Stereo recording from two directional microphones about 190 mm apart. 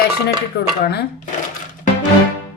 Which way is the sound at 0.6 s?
55° left (ahead or behind).